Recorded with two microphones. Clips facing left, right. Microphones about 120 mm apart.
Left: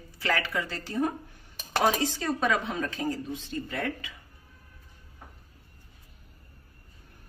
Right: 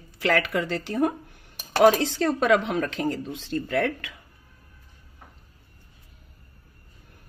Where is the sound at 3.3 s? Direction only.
90° right.